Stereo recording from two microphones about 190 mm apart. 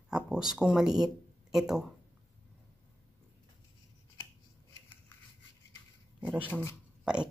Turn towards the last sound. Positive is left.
turn(degrees=-5)  # may be behind; listen again after turning